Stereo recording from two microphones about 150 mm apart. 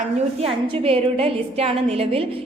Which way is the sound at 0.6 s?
35° right (ahead or behind).